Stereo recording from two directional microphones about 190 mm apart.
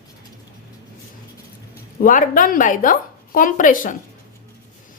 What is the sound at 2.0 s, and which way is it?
A woman's voice, 45° left (ahead or behind).